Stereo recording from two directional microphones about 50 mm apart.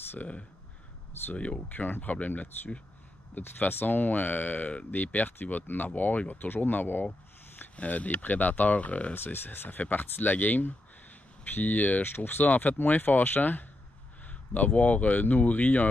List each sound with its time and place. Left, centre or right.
1.3 s speech: left
9.1 s speech: left